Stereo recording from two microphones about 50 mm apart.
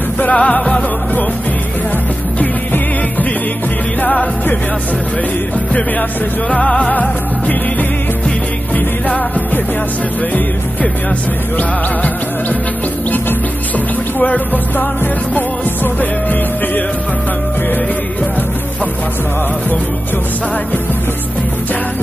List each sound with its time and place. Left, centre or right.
0.2 s music: left
4.0 s music: left
6.5 s music: left
14.2 s music: left